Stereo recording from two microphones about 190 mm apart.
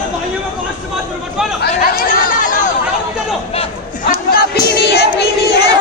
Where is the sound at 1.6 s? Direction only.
55° left (ahead or behind).